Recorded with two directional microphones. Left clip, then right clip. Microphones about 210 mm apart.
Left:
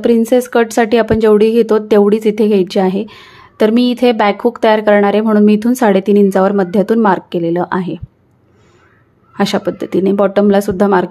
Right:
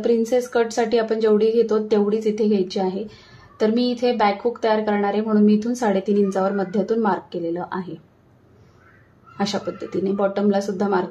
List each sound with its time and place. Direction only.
0.0 s speech: 35° left (ahead or behind)
9.4 s speech: 40° left (ahead or behind)